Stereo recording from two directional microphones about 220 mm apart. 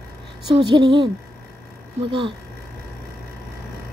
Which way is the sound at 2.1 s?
20° right (ahead or behind).